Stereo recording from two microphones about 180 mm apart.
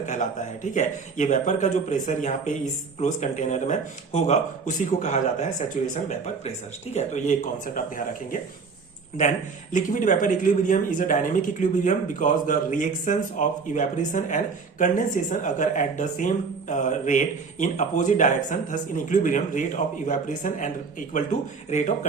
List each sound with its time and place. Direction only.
0.0 s speech: 45° left (ahead or behind)
9.7 s speech: 45° left (ahead or behind)